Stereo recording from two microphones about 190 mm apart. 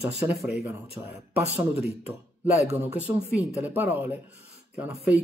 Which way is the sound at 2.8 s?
5° right (ahead or behind).